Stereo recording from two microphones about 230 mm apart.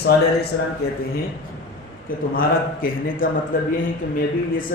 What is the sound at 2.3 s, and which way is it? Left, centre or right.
Speech, left.